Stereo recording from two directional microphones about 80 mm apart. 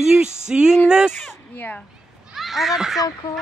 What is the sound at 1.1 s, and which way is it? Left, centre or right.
Speech, left.